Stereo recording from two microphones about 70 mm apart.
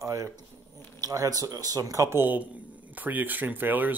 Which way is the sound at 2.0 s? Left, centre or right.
Right.